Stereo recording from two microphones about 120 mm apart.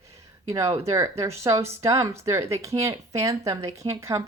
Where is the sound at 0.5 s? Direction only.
25° right (ahead or behind).